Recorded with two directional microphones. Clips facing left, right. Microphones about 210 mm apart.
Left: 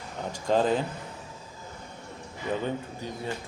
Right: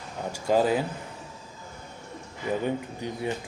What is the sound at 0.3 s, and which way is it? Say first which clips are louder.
Speech: right 1 dB; 10° right (ahead or behind).